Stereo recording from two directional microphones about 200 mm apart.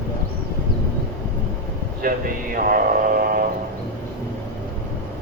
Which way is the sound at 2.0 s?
45° right (ahead or behind).